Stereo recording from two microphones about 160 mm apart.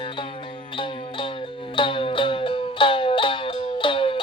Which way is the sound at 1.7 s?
35° left (ahead or behind).